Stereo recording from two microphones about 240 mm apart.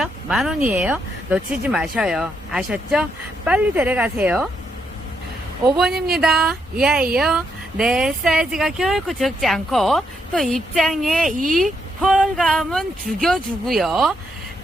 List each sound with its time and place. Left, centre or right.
0.0 s speech: centre
5.7 s speech: centre
11.3 s speech: right
11.5 s speech: centre